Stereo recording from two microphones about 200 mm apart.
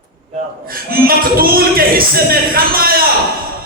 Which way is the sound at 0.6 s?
45° right (ahead or behind).